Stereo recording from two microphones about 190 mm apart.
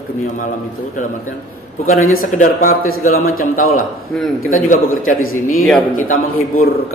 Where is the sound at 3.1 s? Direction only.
90° left.